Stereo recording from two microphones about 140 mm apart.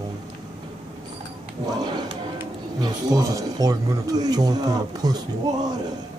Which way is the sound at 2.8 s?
25° right (ahead or behind).